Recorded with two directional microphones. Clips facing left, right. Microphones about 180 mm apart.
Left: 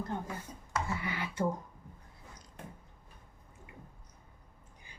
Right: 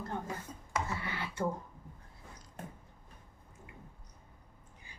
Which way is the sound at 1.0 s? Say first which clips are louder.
Left 2 dB; 15° left (ahead or behind).